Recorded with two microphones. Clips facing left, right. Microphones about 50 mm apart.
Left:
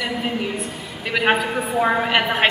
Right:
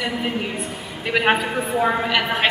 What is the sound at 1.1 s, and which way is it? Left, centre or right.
Speech, centre.